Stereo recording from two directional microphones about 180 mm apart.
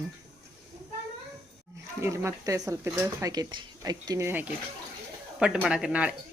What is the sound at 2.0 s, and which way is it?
Speech, 15° right (ahead or behind).